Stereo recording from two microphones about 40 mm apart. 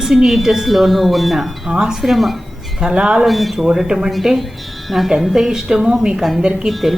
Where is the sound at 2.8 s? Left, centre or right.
Right.